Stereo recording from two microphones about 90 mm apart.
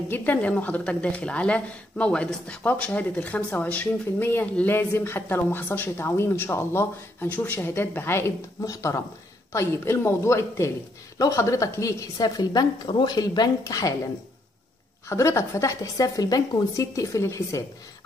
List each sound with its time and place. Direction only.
0.1 s a woman's voice: 20° left (ahead or behind); by 13.9 s 40° left (ahead or behind)
15.0 s a woman's voice: 35° left (ahead or behind)